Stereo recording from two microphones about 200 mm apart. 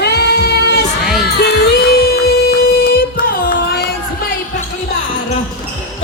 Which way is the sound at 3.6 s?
50° left (ahead or behind).